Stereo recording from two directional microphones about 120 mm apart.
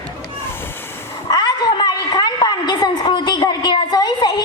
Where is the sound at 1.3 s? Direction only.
35° left (ahead or behind).